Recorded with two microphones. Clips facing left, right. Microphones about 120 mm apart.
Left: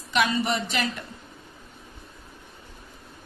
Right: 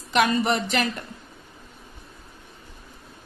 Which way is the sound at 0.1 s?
50° right (ahead or behind).